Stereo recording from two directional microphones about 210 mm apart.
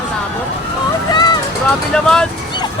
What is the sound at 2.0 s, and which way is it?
Speech, 5° left (ahead or behind).